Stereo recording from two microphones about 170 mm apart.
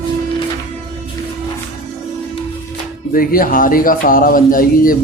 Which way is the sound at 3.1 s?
60° left (ahead or behind).